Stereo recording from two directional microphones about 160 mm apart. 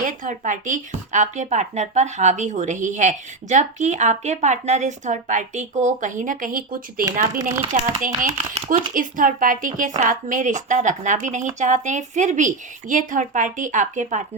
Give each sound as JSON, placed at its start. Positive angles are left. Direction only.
{"t": 0.0, "sound": "speech", "side_deg": -50}
{"t": 7.3, "sound": "speech", "side_deg": -15}
{"t": 7.7, "sound": "speech", "side_deg": -55}